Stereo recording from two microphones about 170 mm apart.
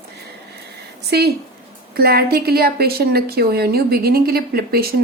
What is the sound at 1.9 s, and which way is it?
A woman's voice, 65° right (ahead or behind).